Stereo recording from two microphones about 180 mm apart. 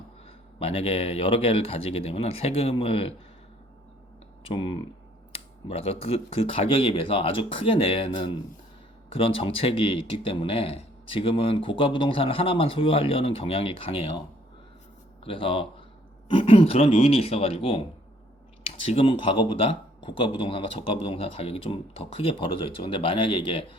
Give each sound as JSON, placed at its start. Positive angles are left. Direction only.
{"t": 0.6, "sound": "speech", "side_deg": 35}
{"t": 4.4, "sound": "speech", "side_deg": 30}
{"t": 15.2, "sound": "speech", "side_deg": 30}
{"t": 18.9, "sound": "speech", "side_deg": 30}